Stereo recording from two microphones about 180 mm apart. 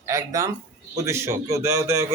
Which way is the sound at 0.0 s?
20° right (ahead or behind).